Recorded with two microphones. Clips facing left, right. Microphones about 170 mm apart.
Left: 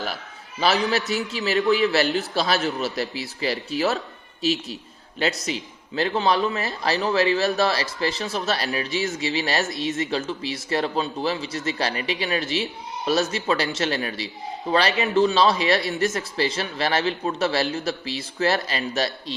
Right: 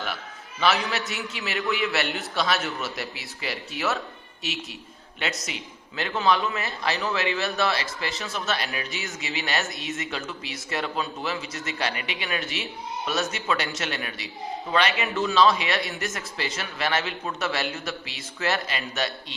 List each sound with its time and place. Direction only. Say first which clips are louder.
0.6 s a man's voice: left 3 dB; 35° left (ahead or behind)